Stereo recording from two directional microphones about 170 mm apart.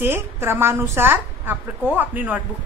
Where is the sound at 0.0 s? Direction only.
15° right (ahead or behind).